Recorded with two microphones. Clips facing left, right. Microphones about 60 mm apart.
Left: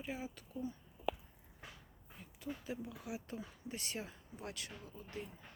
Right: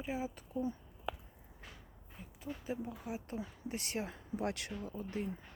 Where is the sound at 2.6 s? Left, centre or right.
Right.